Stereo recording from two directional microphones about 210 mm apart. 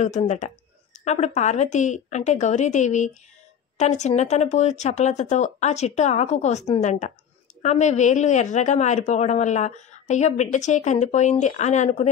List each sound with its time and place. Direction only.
0.0 s a woman's voice: 35° left (ahead or behind)